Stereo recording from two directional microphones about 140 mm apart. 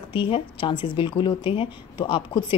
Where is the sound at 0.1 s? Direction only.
35° left (ahead or behind).